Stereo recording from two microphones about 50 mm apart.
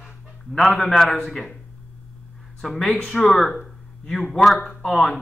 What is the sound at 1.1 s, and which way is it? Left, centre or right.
Speech, centre.